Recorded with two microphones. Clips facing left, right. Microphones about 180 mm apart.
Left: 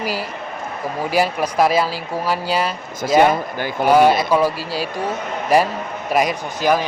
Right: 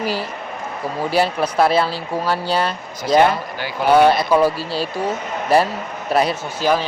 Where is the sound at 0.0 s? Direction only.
10° left (ahead or behind).